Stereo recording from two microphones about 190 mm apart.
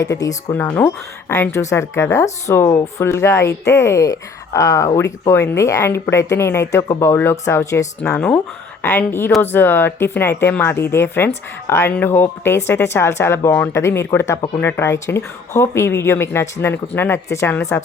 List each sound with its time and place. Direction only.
0.0 s speech: 15° left (ahead or behind)
8.1 s speech: 5° left (ahead or behind)